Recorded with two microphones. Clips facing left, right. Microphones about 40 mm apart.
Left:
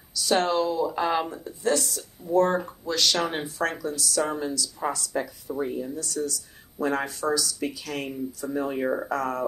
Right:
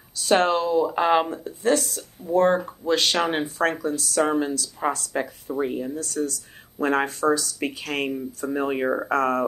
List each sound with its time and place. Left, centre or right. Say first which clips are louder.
0.2 s speech: right 3 dB; right
8.8 s speech: right 2 dB; centre
9.1 s speech: right 6 dB; right